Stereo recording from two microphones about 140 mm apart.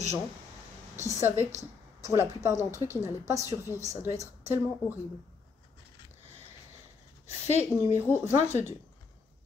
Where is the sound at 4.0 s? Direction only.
20° right (ahead or behind).